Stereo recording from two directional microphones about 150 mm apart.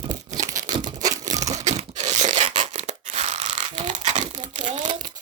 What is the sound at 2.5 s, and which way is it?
Crushing, 50° right (ahead or behind).